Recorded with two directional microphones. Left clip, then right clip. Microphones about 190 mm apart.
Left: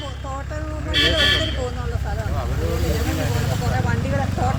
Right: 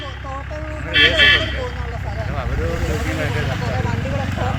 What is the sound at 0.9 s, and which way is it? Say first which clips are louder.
Speech: right 5 dB; 40° left (ahead or behind).